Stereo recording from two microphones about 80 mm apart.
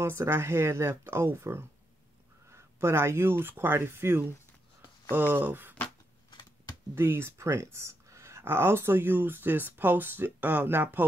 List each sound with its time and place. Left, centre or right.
0.0 s speech: right
7.0 s speech: right